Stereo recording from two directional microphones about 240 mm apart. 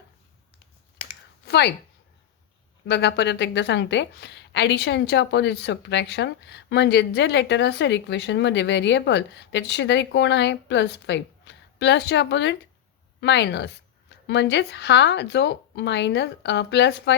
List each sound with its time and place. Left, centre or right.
1.5 s speech: left
2.8 s a woman's voice: left